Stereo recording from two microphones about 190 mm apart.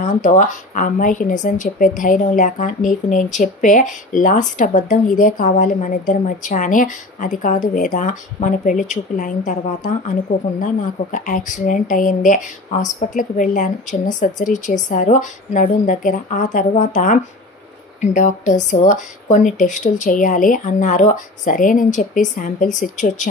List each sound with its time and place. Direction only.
0.0 s speech: 40° left (ahead or behind)